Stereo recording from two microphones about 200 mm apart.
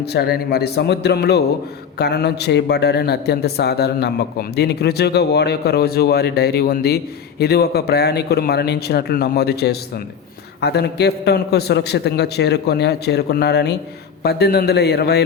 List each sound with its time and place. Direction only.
0.0 s a man's voice: 55° left (ahead or behind)